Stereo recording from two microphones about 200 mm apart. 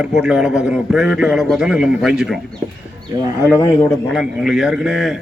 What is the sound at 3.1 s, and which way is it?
Speech, 15° right (ahead or behind).